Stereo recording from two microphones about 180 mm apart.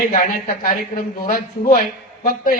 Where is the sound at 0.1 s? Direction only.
50° left (ahead or behind).